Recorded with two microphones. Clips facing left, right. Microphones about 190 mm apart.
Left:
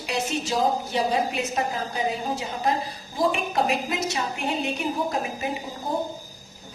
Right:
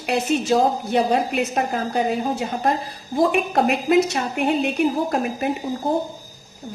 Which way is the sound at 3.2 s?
60° right (ahead or behind).